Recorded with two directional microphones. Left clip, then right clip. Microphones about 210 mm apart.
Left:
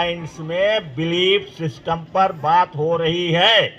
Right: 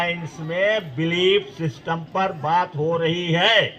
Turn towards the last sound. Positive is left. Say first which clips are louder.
# left 3 dB
turn(degrees=35)  # may be behind; listen again after turning